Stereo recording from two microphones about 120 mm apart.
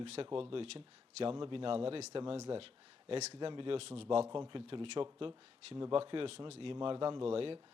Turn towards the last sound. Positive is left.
turn(degrees=-50)  # may be behind; listen again after turning